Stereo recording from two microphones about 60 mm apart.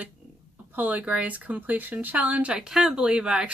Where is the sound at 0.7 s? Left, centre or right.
Right.